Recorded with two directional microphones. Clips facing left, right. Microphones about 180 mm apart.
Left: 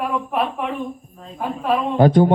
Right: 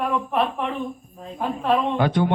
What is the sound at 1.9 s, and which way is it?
Speech, 40° left (ahead or behind).